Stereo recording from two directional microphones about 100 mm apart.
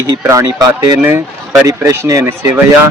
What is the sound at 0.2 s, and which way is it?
A man's voice, 30° right (ahead or behind).